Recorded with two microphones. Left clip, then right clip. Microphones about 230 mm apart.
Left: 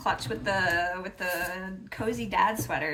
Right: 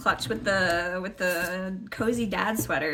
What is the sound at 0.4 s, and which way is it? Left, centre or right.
Speech, left.